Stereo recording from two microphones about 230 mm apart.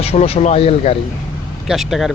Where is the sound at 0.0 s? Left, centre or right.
Left.